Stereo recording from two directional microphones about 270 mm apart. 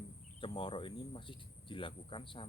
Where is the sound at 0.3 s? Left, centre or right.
Centre.